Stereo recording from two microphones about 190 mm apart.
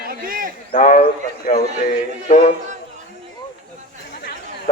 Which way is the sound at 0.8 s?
40° left (ahead or behind).